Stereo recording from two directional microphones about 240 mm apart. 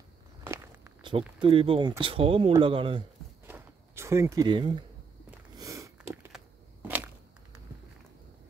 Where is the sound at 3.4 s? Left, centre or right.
Centre.